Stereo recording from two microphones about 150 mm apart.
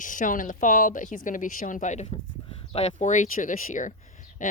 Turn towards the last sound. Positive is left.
turn(degrees=60)  # may be behind; listen again after turning